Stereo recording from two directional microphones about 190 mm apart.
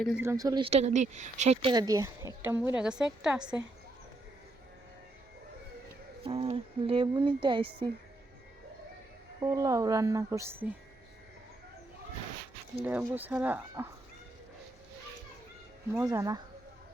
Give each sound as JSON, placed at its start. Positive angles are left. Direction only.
{"t": 0.0, "sound": "speech", "side_deg": -5}
{"t": 1.7, "sound": "a woman's voice", "side_deg": -20}
{"t": 6.2, "sound": "a sound", "side_deg": -30}
{"t": 9.4, "sound": "a woman's voice", "side_deg": -20}
{"t": 12.8, "sound": "a woman's voice", "side_deg": -10}
{"t": 15.9, "sound": "a woman's voice", "side_deg": -15}